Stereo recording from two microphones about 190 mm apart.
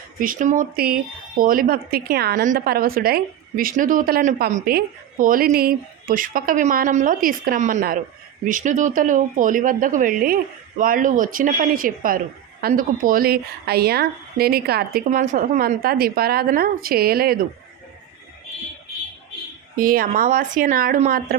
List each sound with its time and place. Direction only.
0.2 s a woman's voice: 45° right (ahead or behind)
19.7 s a woman's voice: 50° right (ahead or behind)